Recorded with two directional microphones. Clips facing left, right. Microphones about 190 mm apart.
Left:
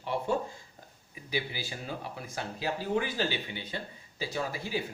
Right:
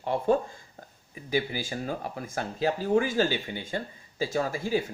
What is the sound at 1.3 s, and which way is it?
Speech, 50° right (ahead or behind).